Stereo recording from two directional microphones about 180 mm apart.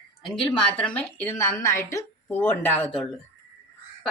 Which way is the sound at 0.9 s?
10° left (ahead or behind).